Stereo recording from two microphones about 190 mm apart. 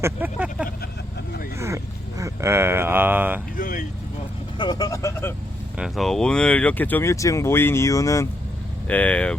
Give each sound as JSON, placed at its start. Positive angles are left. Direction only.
{"t": 0.0, "sound": "vehicle", "side_deg": -10}
{"t": 1.5, "sound": "a sound", "side_deg": -15}
{"t": 3.6, "sound": "vehicle", "side_deg": 45}
{"t": 4.5, "sound": "vehicle", "side_deg": 25}
{"t": 5.7, "sound": "speech", "side_deg": 0}